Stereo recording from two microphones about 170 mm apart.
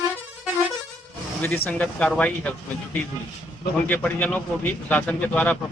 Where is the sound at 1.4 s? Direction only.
10° left (ahead or behind).